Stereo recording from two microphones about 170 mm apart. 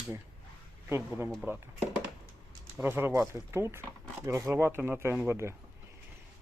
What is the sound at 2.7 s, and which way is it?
Speech, 10° right (ahead or behind).